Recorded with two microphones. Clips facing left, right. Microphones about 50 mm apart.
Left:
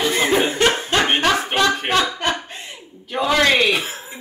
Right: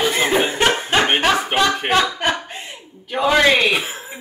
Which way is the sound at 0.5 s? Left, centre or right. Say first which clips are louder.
Right 1 dB; centre.